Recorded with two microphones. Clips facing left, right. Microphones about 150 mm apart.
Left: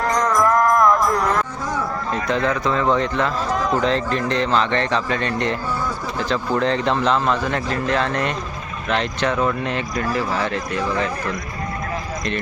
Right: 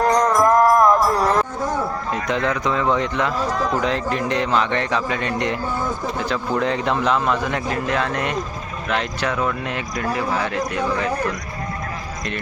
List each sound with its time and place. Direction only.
0.1 s music: 20° right (ahead or behind)
2.1 s a sound: 15° right (ahead or behind)
2.5 s speech: 15° right (ahead or behind)
3.5 s speech: 15° left (ahead or behind)
3.8 s speech: 10° right (ahead or behind)